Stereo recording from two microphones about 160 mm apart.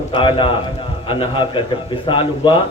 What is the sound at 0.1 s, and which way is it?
A man's voice, 30° left (ahead or behind).